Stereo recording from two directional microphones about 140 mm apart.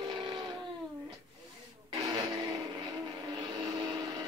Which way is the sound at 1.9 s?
30° right (ahead or behind).